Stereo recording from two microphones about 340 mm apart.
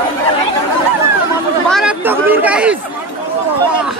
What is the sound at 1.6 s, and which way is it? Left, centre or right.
Speech, centre.